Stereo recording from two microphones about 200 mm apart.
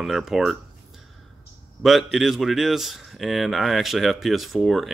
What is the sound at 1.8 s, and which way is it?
Speech, centre (ahead or behind).